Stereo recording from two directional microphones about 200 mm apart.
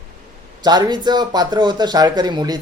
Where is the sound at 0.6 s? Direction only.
20° right (ahead or behind).